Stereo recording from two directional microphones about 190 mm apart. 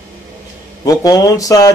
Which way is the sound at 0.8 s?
20° left (ahead or behind).